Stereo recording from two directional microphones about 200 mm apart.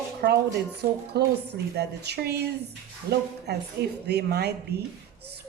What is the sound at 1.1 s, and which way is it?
Speech, 50° right (ahead or behind).